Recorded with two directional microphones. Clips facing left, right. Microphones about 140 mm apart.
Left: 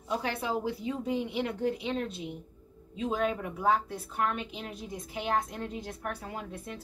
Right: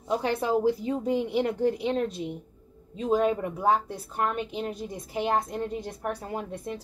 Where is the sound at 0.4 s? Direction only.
40° right (ahead or behind).